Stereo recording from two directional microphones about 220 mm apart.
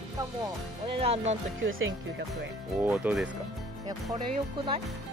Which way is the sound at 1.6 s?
60° right (ahead or behind).